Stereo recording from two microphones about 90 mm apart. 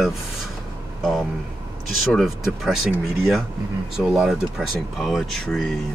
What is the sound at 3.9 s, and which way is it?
Speech, 10° right (ahead or behind).